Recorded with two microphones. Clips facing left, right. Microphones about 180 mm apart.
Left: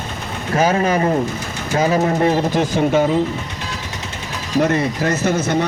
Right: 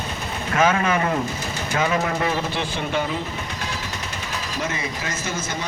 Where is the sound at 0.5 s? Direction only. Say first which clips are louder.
Left 4 dB; 35° left (ahead or behind).